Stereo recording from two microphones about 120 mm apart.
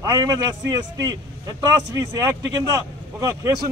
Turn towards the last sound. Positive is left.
turn(degrees=-30)  # may be behind; listen again after turning